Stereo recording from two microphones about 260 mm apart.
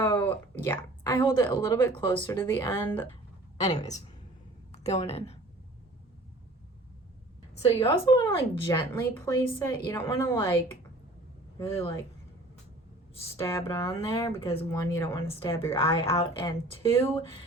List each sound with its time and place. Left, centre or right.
0.0 s speech: centre
3.6 s speech: left
7.5 s speech: left
11.5 s speech: left
13.4 s speech: centre
14.3 s speech: left
16.0 s speech: left